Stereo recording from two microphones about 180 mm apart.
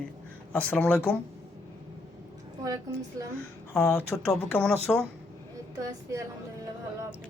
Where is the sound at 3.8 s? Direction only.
15° left (ahead or behind).